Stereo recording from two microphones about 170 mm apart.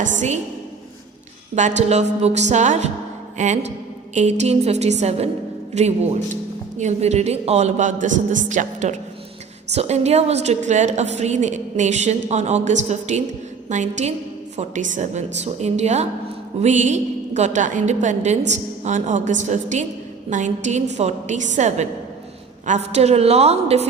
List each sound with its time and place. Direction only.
1.5 s a woman's voice: 45° right (ahead or behind)